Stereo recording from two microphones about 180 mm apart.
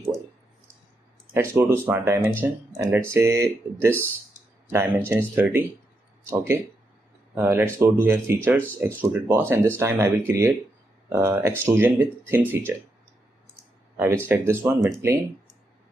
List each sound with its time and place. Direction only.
1.3 s speech: 15° right (ahead or behind)
13.9 s speech: 15° right (ahead or behind)